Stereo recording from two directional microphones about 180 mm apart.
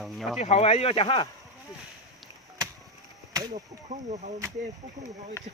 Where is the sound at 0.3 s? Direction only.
35° left (ahead or behind).